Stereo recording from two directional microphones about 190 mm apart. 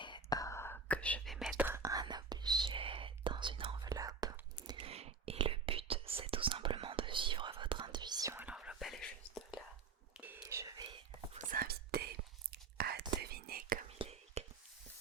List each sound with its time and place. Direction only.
0.0 s whispering: 20° left (ahead or behind); by 9.6 s centre (ahead or behind)
10.2 s whispering: 10° right (ahead or behind)
11.3 s whispering: 50° right (ahead or behind)
14.0 s whispering: 35° right (ahead or behind)